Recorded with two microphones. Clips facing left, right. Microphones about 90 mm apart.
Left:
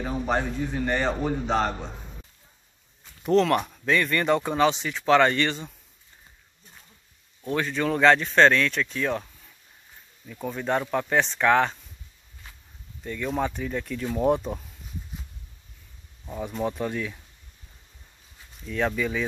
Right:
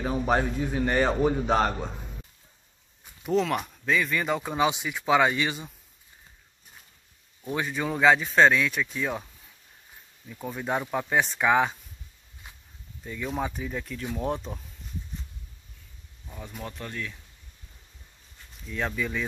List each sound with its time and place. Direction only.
0.8 s speech: 10° right (ahead or behind)
3.0 s speech: 5° right (ahead or behind)
7.4 s speech: 10° right (ahead or behind)
12.4 s walk: 15° right (ahead or behind)
13.0 s speech: 5° right (ahead or behind)
16.3 s speech: 20° left (ahead or behind)
18.7 s speech: centre (ahead or behind)